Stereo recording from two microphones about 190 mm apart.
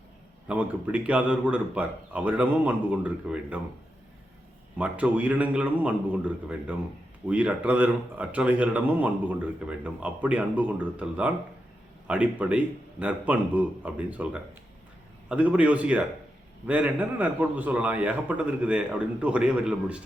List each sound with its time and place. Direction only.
0.4 s speech: 5° right (ahead or behind)
4.8 s speech: 5° right (ahead or behind)